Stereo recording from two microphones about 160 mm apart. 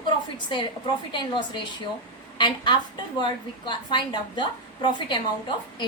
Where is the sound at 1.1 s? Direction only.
30° left (ahead or behind).